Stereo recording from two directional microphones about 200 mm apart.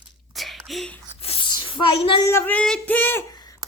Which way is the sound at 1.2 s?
25° left (ahead or behind).